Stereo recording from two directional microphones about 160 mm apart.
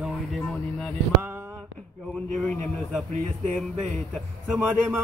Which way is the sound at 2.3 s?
Centre (ahead or behind).